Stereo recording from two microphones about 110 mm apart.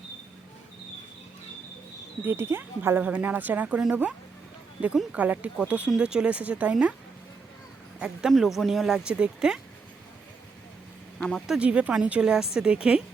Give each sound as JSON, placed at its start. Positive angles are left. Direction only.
{"t": 2.2, "sound": "speech", "side_deg": -20}
{"t": 7.9, "sound": "speech", "side_deg": -10}
{"t": 11.2, "sound": "speech", "side_deg": 5}